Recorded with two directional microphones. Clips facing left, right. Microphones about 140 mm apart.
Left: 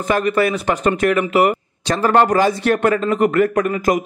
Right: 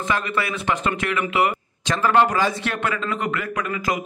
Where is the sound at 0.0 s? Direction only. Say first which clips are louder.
Left 8 dB; 40° left (ahead or behind).